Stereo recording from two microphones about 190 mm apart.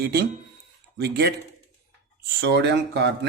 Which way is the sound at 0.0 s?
55° right (ahead or behind).